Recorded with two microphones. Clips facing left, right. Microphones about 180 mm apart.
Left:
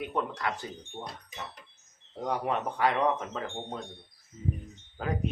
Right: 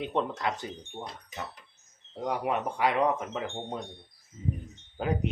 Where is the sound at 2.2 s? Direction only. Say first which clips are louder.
Right 1 dB; 10° right (ahead or behind).